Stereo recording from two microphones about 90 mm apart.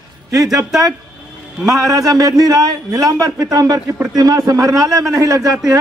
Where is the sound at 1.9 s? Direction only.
40° right (ahead or behind).